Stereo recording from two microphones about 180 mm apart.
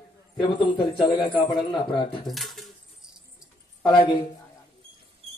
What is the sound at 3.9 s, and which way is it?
Speech, 25° left (ahead or behind).